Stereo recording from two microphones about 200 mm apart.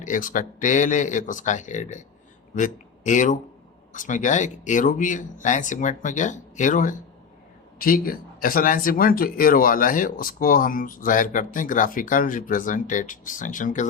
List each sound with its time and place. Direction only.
0.0 s speech: 40° left (ahead or behind)